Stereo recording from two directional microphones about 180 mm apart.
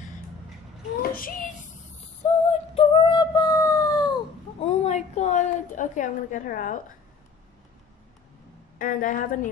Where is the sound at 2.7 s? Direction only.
30° left (ahead or behind).